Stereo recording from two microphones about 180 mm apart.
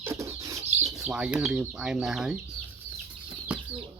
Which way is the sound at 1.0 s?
5° right (ahead or behind).